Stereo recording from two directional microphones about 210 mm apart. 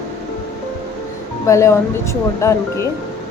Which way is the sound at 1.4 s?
15° left (ahead or behind).